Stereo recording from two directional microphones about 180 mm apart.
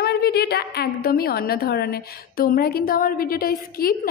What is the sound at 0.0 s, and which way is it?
A woman's voice, 60° left (ahead or behind).